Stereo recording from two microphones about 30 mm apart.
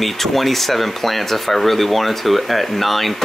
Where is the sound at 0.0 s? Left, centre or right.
Centre.